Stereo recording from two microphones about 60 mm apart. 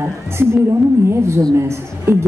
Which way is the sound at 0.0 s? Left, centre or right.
Right.